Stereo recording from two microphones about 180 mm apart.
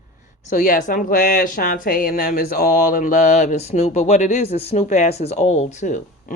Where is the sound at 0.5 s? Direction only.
45° left (ahead or behind).